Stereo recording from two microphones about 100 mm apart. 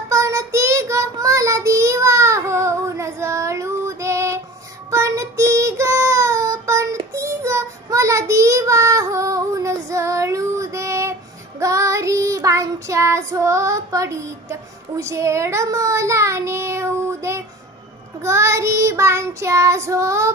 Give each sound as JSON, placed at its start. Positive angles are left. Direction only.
{"t": 0.1, "sound": "child singing", "side_deg": -30}